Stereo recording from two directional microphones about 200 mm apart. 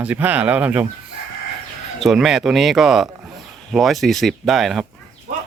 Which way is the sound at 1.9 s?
Centre (ahead or behind).